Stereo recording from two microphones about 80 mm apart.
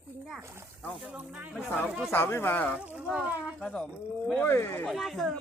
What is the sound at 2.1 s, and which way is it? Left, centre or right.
Speech, left.